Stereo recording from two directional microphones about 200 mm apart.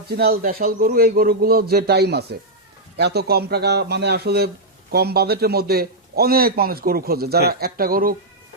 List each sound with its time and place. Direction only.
0.1 s speech: 50° right (ahead or behind)